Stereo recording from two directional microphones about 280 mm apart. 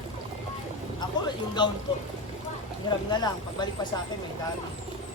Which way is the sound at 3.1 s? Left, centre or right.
Centre.